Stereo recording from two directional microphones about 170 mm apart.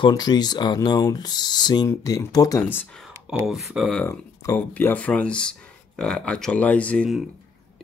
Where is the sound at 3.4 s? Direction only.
Centre (ahead or behind).